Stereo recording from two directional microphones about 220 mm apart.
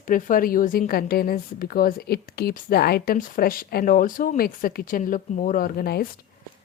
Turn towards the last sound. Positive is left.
turn(degrees=45)  # may be behind; listen again after turning